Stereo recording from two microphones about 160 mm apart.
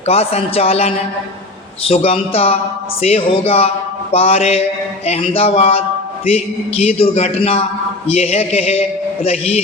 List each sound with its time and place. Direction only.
0.0 s a man's voice: 40° left (ahead or behind)